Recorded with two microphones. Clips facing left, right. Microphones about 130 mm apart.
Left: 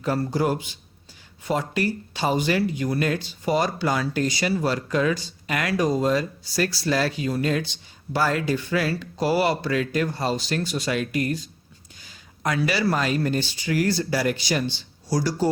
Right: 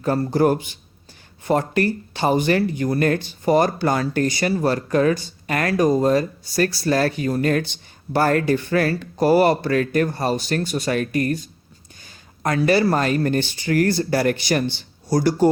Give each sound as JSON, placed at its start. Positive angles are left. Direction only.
{"t": 0.0, "sound": "a man's voice", "side_deg": -45}